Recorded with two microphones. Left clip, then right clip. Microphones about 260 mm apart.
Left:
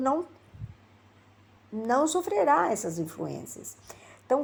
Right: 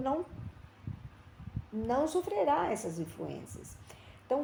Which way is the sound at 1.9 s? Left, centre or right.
Left.